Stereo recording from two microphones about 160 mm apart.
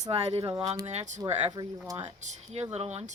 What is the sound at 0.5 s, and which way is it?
Speech, 20° right (ahead or behind).